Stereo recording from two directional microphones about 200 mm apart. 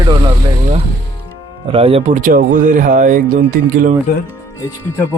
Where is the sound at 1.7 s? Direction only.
30° right (ahead or behind).